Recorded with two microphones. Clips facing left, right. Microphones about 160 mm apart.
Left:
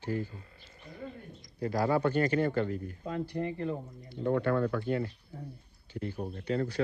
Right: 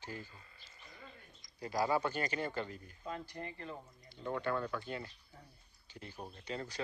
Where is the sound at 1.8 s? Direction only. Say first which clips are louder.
Left 9 dB; 55° left (ahead or behind).